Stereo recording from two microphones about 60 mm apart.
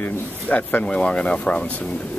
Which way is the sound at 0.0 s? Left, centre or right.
Left.